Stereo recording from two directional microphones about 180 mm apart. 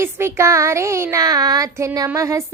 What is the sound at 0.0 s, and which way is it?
A woman's voice, 15° right (ahead or behind).